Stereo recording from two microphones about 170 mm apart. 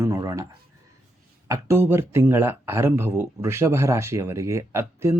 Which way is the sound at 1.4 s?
15° right (ahead or behind).